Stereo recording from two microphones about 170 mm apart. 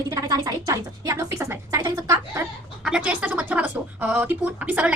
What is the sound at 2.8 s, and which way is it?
Speech, 5° right (ahead or behind).